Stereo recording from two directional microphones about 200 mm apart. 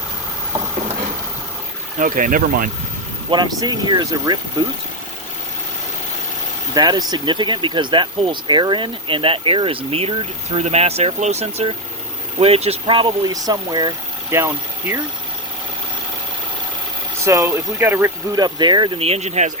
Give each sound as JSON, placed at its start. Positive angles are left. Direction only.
{"t": 2.0, "sound": "speech", "side_deg": -40}
{"t": 3.2, "sound": "speech", "side_deg": -20}
{"t": 6.7, "sound": "speech", "side_deg": -20}
{"t": 17.2, "sound": "speech", "side_deg": -15}